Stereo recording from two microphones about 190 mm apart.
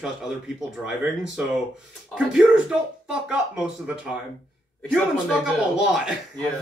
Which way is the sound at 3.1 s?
5° right (ahead or behind).